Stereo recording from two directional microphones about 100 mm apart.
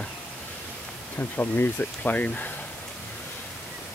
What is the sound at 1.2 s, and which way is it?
Speech, 20° left (ahead or behind).